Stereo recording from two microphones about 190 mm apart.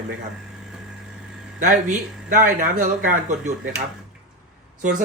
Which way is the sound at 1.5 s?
45° right (ahead or behind).